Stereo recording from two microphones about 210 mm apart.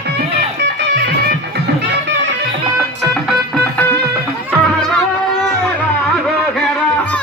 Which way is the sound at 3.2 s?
5° left (ahead or behind).